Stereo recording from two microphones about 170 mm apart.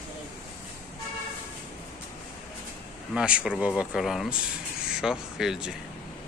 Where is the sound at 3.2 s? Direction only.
5° right (ahead or behind).